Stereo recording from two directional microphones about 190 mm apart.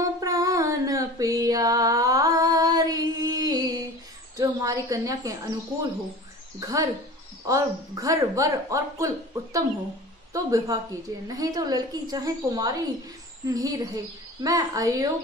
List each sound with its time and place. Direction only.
0.2 s female singing: 20° right (ahead or behind)
4.4 s a woman's voice: 15° right (ahead or behind)